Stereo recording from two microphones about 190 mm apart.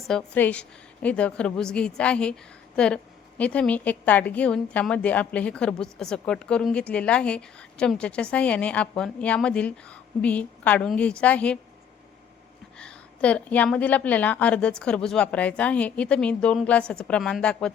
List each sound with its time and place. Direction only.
0.1 s a woman's voice: 5° left (ahead or behind)
12.8 s a woman's voice: 5° left (ahead or behind)